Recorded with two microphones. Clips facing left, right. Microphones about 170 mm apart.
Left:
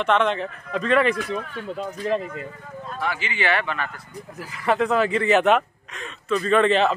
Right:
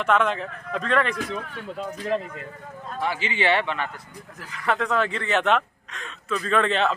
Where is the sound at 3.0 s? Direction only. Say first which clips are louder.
Right 1 dB; 30° right (ahead or behind).